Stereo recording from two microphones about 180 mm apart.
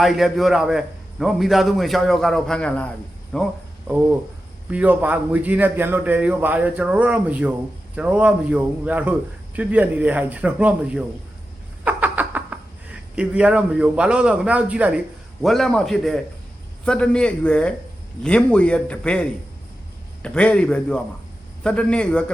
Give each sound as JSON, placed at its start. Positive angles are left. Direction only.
{"t": 0.0, "sound": "a man's voice", "side_deg": 0}
{"t": 3.8, "sound": "a man's voice", "side_deg": -10}